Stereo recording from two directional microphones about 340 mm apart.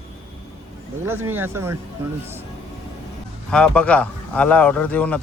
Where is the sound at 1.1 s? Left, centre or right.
Centre.